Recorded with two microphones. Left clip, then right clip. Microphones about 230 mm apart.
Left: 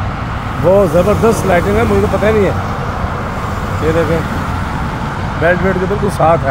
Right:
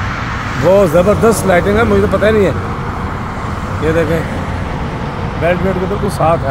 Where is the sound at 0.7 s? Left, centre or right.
Centre.